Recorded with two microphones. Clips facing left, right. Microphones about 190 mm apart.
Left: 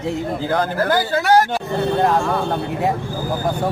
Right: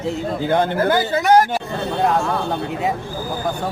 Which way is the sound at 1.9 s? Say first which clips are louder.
Even; centre (ahead or behind).